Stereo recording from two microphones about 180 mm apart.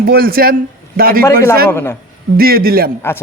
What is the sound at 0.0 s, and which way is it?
A man's voice, 55° right (ahead or behind).